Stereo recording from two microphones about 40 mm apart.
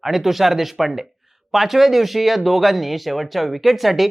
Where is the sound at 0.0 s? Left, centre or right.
Centre.